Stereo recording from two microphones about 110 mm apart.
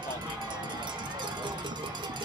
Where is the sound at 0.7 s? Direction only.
45° right (ahead or behind).